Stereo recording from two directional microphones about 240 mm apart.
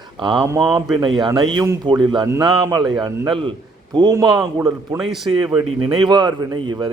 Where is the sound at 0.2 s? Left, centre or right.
Centre.